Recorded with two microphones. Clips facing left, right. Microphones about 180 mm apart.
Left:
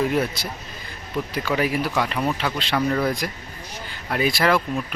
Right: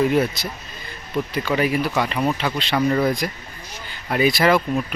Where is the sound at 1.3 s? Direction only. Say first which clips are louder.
Right 2 dB; 5° left (ahead or behind).